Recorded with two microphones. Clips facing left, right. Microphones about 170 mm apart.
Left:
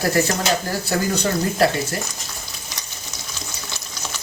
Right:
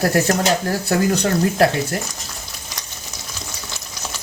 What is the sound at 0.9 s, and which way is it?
Speech, 60° right (ahead or behind).